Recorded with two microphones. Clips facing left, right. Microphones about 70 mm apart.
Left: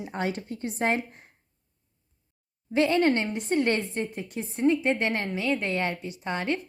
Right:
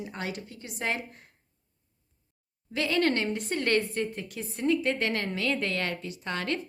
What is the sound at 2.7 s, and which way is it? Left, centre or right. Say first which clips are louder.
A woman's voice: left 4 dB; left.